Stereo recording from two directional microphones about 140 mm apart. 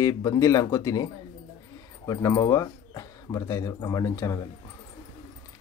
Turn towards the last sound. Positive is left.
turn(degrees=20)  # may be behind; listen again after turning